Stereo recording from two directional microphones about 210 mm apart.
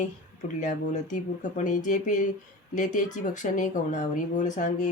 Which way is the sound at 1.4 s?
35° left (ahead or behind).